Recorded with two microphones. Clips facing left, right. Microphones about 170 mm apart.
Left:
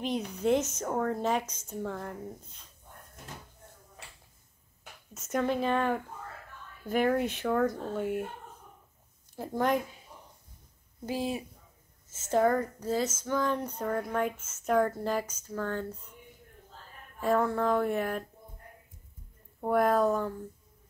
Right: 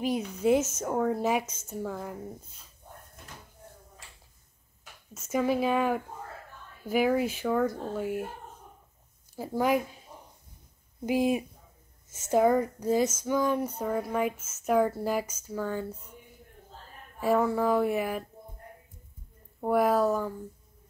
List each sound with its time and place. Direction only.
0.0 s speech: 5° right (ahead or behind)
5.1 s speech: centre (ahead or behind)
9.3 s speech: 5° right (ahead or behind)
11.1 s speech: 15° right (ahead or behind)
17.2 s speech: 5° right (ahead or behind)
19.6 s speech: 5° right (ahead or behind)